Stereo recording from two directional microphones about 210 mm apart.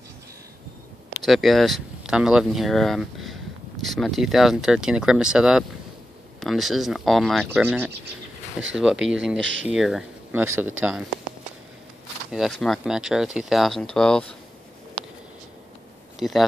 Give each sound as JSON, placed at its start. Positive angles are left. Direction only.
{"t": 1.2, "sound": "speech", "side_deg": 0}
{"t": 9.4, "sound": "speech", "side_deg": -60}
{"t": 9.7, "sound": "speech", "side_deg": 0}
{"t": 12.3, "sound": "speech", "side_deg": 0}
{"t": 16.2, "sound": "speech", "side_deg": 0}